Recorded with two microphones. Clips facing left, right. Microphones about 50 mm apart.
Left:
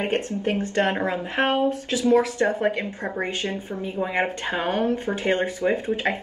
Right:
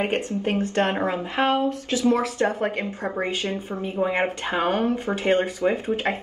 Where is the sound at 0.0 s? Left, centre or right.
Right.